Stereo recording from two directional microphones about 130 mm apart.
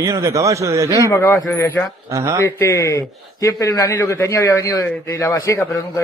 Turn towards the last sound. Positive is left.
turn(degrees=20)  # may be behind; listen again after turning